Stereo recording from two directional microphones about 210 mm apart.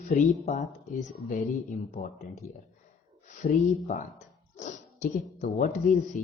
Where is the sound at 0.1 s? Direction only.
35° left (ahead or behind).